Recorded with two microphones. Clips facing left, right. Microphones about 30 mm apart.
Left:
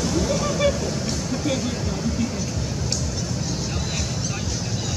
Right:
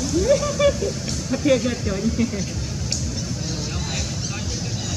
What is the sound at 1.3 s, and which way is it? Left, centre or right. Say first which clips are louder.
Vehicle: right 8 dB; centre.